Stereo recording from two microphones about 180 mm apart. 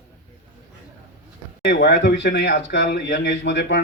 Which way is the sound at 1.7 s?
70° left (ahead or behind).